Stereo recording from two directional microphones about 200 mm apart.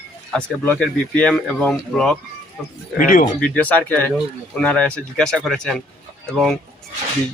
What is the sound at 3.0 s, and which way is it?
Speech, 45° left (ahead or behind).